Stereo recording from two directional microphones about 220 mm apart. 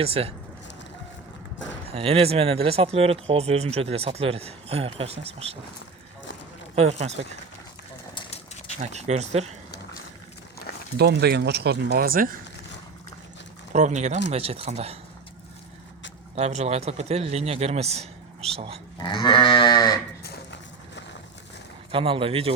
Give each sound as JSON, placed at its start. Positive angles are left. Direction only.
{"t": 0.0, "sound": "speech", "side_deg": -25}
{"t": 1.9, "sound": "speech", "side_deg": -25}
{"t": 6.7, "sound": "speech", "side_deg": -30}
{"t": 8.1, "sound": "a sound", "side_deg": 20}
{"t": 8.8, "sound": "speech", "side_deg": -30}
{"t": 10.9, "sound": "speech", "side_deg": -50}
{"t": 13.7, "sound": "speech", "side_deg": -30}
{"t": 16.3, "sound": "speech", "side_deg": -30}
{"t": 19.0, "sound": "sheep", "side_deg": 20}
{"t": 20.2, "sound": "a sound", "side_deg": 50}
{"t": 21.9, "sound": "speech", "side_deg": -25}